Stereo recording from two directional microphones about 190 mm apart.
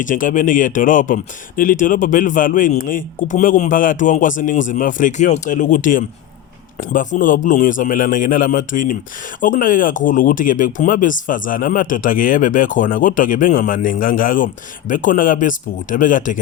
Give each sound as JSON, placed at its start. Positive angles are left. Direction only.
{"t": 0.0, "sound": "speech", "side_deg": 45}